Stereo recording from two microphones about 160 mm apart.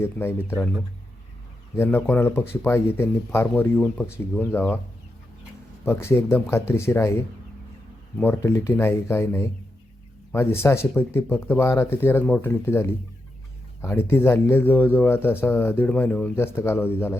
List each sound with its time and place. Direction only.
0.0 s speech: 15° left (ahead or behind)
1.7 s speech: 15° left (ahead or behind)
5.8 s speech: 15° left (ahead or behind)